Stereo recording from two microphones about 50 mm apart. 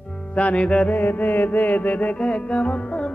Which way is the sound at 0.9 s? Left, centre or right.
Left.